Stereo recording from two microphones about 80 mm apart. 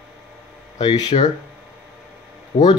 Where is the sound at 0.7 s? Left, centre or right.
Left.